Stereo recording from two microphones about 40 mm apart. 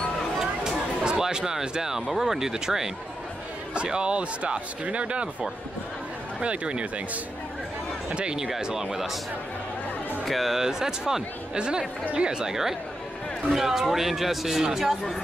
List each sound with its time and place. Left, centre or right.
1.0 s speech: centre
3.7 s speech: right
6.4 s speech: right
8.1 s speech: right; by 9.2 s centre
10.2 s speech: centre
11.5 s speech: right
13.5 s speech: centre